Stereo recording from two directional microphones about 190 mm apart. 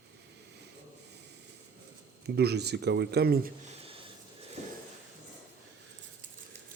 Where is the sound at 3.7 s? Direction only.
30° right (ahead or behind).